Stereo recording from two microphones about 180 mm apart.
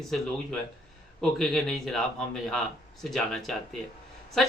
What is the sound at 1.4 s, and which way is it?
Speech, centre (ahead or behind).